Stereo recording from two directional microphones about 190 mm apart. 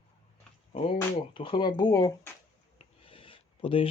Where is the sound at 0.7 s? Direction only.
30° left (ahead or behind).